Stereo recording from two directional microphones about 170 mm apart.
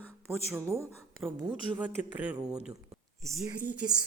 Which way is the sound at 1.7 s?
10° right (ahead or behind).